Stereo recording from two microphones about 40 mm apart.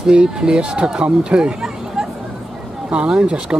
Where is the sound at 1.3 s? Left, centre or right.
Centre.